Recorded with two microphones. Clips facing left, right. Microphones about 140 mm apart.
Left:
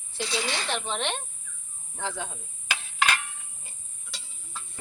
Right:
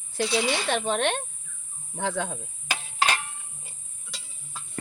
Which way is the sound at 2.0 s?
65° right (ahead or behind).